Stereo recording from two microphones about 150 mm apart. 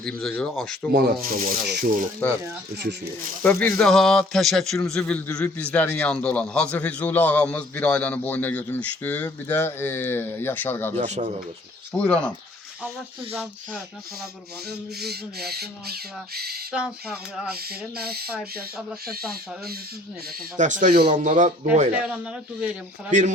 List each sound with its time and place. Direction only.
0.0 s speech: 5° left (ahead or behind)
0.9 s rub: 80° right
2.2 s a man's voice: 10° left (ahead or behind)
2.7 s speech: 90° right
3.4 s a man's voice: 10° left (ahead or behind)
10.9 s speech: 50° right (ahead or behind)
11.9 s a man's voice: 10° left (ahead or behind)
14.7 s speech: 90° right
16.7 s speech: 5° right (ahead or behind)
17.7 s speech: 90° right
20.6 s speech: 55° right (ahead or behind); by 21.1 s 75° right (ahead or behind)
21.1 s speech: 55° right (ahead or behind)
22.0 s speech: 5° right (ahead or behind)
23.1 s speech: 55° right (ahead or behind)